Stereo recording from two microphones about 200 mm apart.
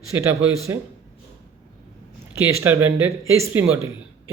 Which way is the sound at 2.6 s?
10° right (ahead or behind).